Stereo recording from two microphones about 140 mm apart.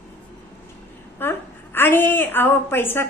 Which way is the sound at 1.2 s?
15° left (ahead or behind).